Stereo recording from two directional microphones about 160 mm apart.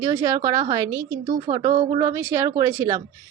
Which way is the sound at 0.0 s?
20° right (ahead or behind).